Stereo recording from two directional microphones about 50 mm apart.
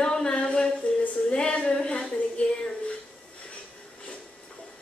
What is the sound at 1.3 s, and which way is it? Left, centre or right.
Speech, left.